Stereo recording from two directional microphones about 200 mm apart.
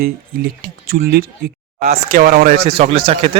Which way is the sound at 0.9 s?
45° right (ahead or behind).